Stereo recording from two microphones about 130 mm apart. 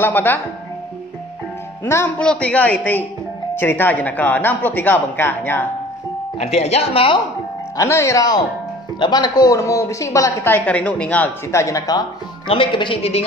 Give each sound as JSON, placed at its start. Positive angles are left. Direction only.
{"t": 0.0, "sound": "speech", "side_deg": 15}
{"t": 2.1, "sound": "speech", "side_deg": 10}
{"t": 6.3, "sound": "speech", "side_deg": 55}
{"t": 7.7, "sound": "speech", "side_deg": 25}
{"t": 11.5, "sound": "speech", "side_deg": 25}
{"t": 12.4, "sound": "speech", "side_deg": 40}